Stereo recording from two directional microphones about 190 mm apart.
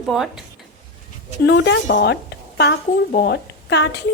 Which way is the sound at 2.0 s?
60° left (ahead or behind).